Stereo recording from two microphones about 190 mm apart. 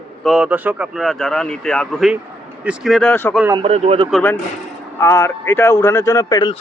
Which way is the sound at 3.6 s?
30° right (ahead or behind).